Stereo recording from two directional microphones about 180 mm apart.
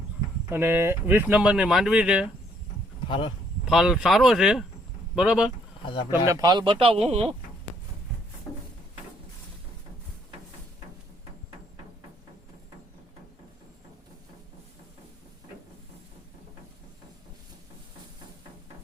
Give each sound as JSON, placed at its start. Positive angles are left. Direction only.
{"t": 0.5, "sound": "speech", "side_deg": -10}
{"t": 3.1, "sound": "speech", "side_deg": 25}
{"t": 3.7, "sound": "speech", "side_deg": 0}
{"t": 5.8, "sound": "speech", "side_deg": 25}
{"t": 6.1, "sound": "speech", "side_deg": -20}